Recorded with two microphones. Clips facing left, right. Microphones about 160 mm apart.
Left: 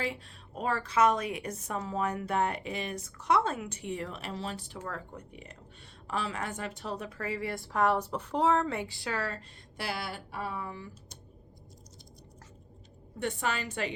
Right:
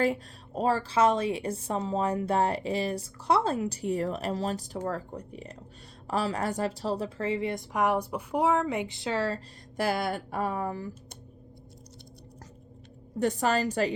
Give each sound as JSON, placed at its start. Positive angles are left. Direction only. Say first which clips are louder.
{"t": 0.0, "sound": "a woman's voice", "louder": "right 8 dB", "side_deg": -40}
{"t": 9.7, "sound": "speech", "louder": "right 9 dB", "side_deg": -45}
{"t": 13.1, "sound": "a woman's voice", "louder": "right 7 dB", "side_deg": -40}